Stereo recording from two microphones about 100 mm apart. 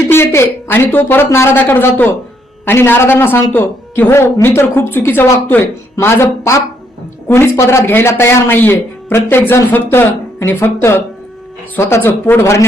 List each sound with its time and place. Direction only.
0.1 s speech: 25° left (ahead or behind)